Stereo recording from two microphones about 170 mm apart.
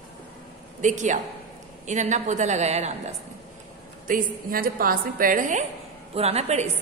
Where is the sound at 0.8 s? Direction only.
45° right (ahead or behind).